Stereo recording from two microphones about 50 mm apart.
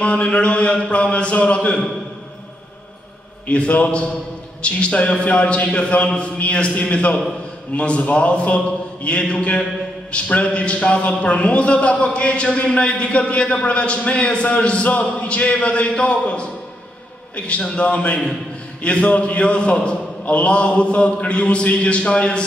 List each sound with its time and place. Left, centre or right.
0.0 s a man's voice: left
3.4 s a man's voice: left
17.7 s a man's voice: left